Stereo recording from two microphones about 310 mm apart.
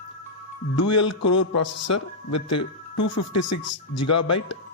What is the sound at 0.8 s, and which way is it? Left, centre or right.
Speech, left.